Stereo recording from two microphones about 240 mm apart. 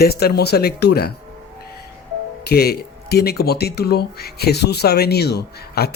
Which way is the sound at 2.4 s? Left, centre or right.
Left.